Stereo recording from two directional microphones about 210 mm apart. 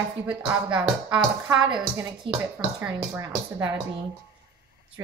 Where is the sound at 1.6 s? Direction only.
20° right (ahead or behind).